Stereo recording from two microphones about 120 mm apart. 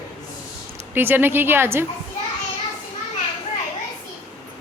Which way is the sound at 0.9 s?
15° right (ahead or behind).